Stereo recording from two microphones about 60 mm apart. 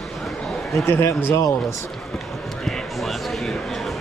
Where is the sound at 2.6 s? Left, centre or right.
Centre.